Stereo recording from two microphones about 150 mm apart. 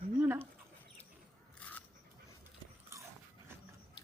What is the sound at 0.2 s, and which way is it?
Rodents, 15° right (ahead or behind).